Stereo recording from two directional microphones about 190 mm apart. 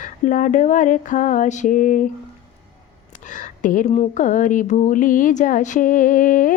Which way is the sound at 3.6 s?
45° left (ahead or behind).